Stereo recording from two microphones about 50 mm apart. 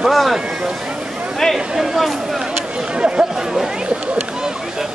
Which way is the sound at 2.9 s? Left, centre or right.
Centre.